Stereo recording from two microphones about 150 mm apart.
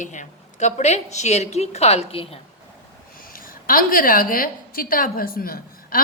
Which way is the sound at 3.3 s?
70° left (ahead or behind).